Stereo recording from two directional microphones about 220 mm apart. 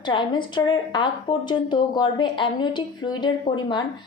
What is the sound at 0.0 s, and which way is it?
A woman's voice, 20° left (ahead or behind).